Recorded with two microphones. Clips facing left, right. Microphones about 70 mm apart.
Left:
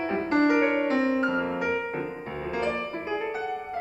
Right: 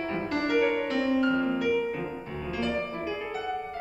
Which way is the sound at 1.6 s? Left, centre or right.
Left.